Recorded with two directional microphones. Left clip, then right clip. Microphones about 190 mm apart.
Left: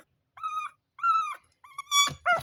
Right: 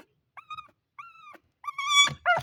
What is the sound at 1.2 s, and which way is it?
Dog, 35° right (ahead or behind).